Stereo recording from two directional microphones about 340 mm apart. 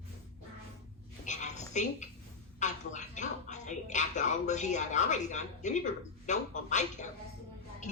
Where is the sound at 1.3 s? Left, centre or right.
Left.